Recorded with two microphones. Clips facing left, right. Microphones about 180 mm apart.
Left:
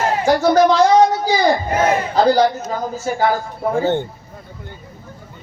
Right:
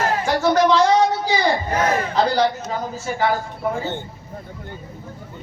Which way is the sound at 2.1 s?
40° left (ahead or behind).